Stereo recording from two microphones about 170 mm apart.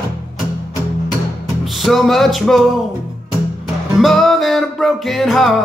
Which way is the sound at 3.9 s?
Centre (ahead or behind).